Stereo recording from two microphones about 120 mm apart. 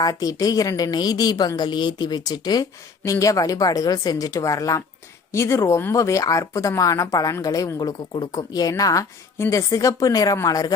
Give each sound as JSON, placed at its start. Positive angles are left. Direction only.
{"t": 0.0, "sound": "a woman's voice", "side_deg": 30}